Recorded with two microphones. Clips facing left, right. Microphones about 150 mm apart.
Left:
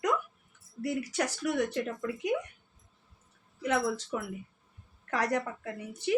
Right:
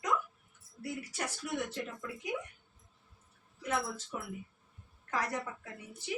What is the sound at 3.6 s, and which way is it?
Speech, 85° left.